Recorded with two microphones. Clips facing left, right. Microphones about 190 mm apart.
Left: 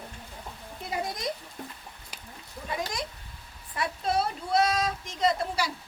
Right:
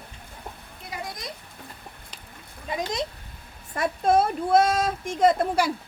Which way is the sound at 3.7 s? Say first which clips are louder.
Right 7 dB; 50° right (ahead or behind).